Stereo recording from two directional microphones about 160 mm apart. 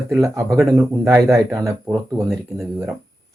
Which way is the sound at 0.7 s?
15° right (ahead or behind).